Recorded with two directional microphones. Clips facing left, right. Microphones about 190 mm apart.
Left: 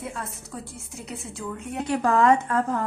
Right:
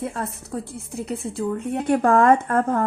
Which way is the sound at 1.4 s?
35° right (ahead or behind).